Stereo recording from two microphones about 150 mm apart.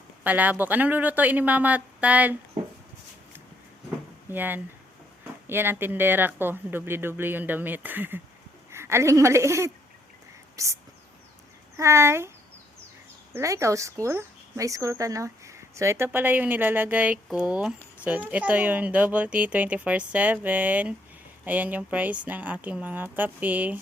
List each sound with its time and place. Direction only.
0.3 s speech: 10° right (ahead or behind)
4.3 s a woman's voice: 15° right (ahead or behind)
11.8 s speech: 20° right (ahead or behind)
13.3 s speech: 20° right (ahead or behind)